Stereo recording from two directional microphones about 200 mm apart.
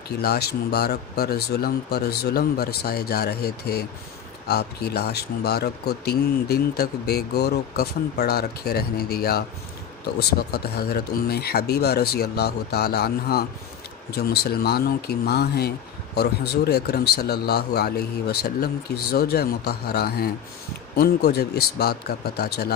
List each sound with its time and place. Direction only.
0.2 s a man's voice: 55° left (ahead or behind)